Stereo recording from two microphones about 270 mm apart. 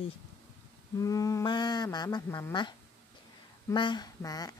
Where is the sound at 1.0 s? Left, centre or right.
Centre.